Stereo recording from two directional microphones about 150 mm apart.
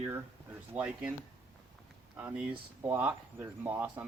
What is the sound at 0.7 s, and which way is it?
Speech, 5° right (ahead or behind).